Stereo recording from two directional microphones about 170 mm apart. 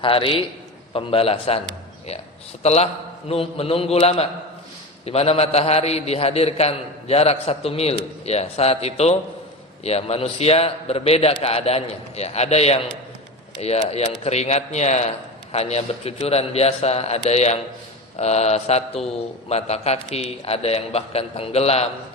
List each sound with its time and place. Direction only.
0.0 s a man's voice: 30° left (ahead or behind)
2.6 s a man's voice: 40° left (ahead or behind)